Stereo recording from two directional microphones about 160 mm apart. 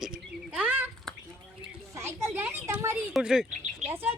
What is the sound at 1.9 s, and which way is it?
A child's voice, 15° right (ahead or behind).